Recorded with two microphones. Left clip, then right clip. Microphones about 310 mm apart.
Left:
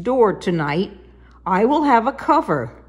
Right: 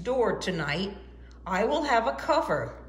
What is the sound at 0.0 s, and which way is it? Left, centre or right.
A woman's voice, centre.